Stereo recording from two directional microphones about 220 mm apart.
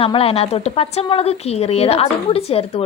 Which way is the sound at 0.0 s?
25° left (ahead or behind).